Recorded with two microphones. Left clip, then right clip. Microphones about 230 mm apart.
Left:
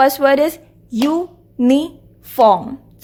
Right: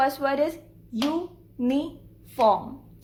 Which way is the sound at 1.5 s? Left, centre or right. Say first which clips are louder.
Left 11 dB; left.